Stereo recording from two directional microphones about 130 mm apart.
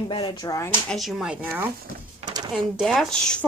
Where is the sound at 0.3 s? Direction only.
30° left (ahead or behind).